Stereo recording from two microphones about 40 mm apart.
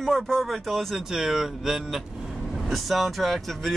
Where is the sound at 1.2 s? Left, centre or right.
Centre.